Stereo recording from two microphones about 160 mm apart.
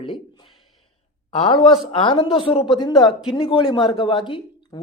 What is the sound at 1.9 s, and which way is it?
A woman's voice, 30° left (ahead or behind).